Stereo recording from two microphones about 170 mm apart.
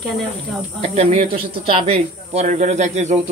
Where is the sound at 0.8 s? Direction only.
40° right (ahead or behind).